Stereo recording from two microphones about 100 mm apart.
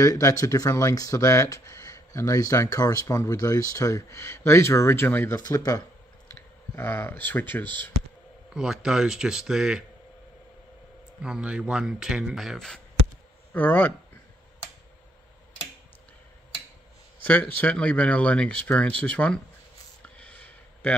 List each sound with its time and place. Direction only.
0.0 s speech: 35° left (ahead or behind)
5.4 s speech: 40° left (ahead or behind)
6.2 s speech: 25° left (ahead or behind)
8.5 s speech: 5° right (ahead or behind)
11.2 s speech: 10° right (ahead or behind)
13.5 s speech: 20° left (ahead or behind)
17.2 s speech: 15° left (ahead or behind)
20.0 s a sound: 10° left (ahead or behind)